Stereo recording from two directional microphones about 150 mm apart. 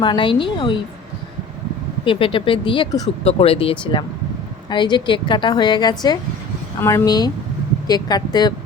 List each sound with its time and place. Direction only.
0.0 s speech: 30° left (ahead or behind)
2.0 s speech: 35° left (ahead or behind)
3.2 s a woman's voice: 40° left (ahead or behind)